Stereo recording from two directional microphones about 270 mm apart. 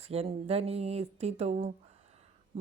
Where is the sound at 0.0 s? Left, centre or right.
Right.